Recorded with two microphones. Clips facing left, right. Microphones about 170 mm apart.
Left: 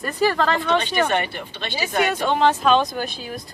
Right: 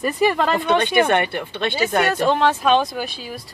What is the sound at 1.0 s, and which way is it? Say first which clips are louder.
Speech: right 3 dB; 55° right (ahead or behind).